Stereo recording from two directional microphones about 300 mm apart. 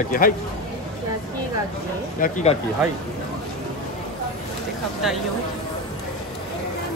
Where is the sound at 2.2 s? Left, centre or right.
Left.